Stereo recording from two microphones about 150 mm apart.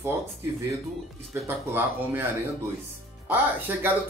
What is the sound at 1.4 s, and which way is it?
Speech, 15° right (ahead or behind).